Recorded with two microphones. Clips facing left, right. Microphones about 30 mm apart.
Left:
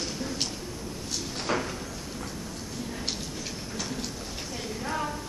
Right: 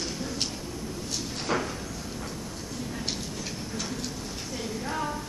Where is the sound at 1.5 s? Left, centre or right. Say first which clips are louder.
Right 1 dB; centre.